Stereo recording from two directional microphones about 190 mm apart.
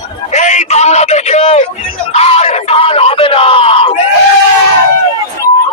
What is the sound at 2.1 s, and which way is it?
Screaming, 35° left (ahead or behind).